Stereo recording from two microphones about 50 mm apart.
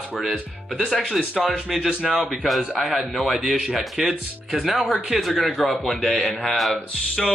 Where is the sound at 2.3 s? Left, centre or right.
Centre.